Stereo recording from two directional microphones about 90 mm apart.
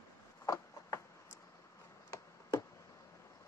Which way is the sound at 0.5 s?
35° left (ahead or behind).